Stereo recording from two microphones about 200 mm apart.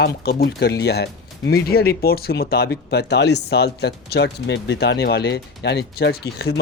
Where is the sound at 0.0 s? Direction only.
55° left (ahead or behind).